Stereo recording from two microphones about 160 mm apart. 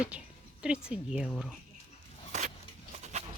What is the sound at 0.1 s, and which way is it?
Speech, 5° right (ahead or behind).